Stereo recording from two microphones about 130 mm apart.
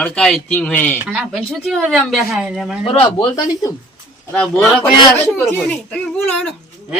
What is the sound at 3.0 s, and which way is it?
Speech, 35° left (ahead or behind).